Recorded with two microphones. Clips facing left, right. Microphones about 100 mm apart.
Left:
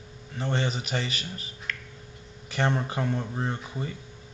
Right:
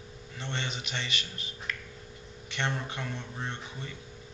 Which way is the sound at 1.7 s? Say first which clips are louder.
Left 2 dB; 10° right (ahead or behind).